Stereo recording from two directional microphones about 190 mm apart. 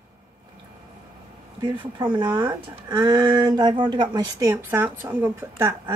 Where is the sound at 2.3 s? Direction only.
15° right (ahead or behind).